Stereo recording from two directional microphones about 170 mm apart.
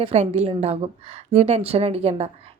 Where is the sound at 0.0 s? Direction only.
35° right (ahead or behind).